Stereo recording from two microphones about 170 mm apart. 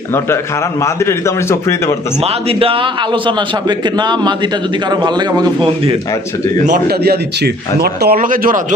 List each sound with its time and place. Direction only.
0.8 s a man's voice: 15° left (ahead or behind)
2.2 s a man's voice: 35° right (ahead or behind)
6.7 s speech: 65° right (ahead or behind); by 8.6 s 50° right (ahead or behind)